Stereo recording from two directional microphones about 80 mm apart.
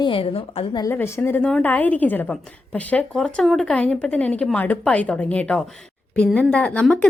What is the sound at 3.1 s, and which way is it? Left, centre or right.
A woman's voice, centre.